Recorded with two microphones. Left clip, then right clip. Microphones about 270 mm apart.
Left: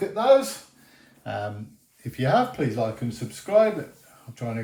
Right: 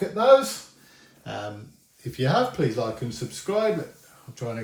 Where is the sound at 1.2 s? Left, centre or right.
Left.